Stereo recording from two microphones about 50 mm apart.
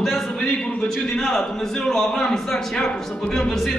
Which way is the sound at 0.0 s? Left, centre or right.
Centre.